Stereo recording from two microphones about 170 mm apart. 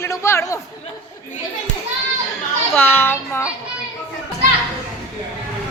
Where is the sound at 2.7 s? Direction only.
10° left (ahead or behind).